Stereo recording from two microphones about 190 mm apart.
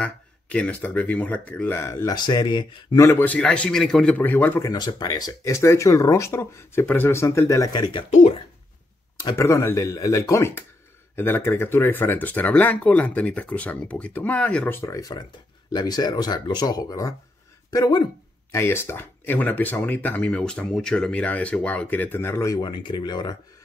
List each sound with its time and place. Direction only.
0.0 s speech: 5° left (ahead or behind); by 8.0 s 20° left (ahead or behind)
8.1 s speech: 35° left (ahead or behind)
9.2 s speech: 15° left (ahead or behind)